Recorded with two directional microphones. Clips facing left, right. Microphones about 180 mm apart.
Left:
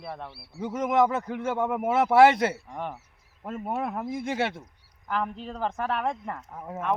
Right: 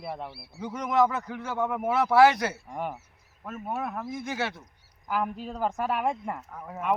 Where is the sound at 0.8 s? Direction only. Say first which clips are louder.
Left 1 dB; 25° left (ahead or behind).